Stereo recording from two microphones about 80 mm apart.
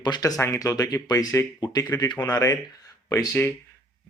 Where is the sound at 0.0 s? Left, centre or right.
Left.